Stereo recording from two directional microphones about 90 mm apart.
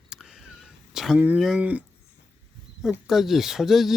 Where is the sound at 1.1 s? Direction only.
20° right (ahead or behind).